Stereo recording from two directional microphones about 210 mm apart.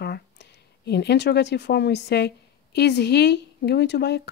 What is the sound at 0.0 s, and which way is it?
Speech, 50° left (ahead or behind).